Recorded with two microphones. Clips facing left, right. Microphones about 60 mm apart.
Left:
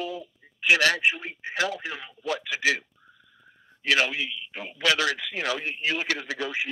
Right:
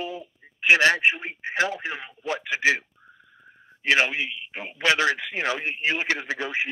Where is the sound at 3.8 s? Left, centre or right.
Right.